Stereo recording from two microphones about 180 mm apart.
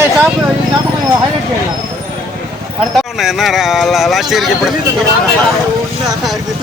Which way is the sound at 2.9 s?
Centre (ahead or behind).